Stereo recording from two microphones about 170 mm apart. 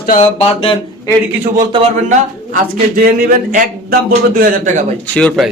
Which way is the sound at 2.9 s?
55° right (ahead or behind).